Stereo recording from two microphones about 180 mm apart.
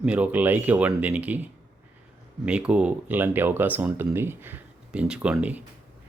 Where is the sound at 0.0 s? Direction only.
5° right (ahead or behind).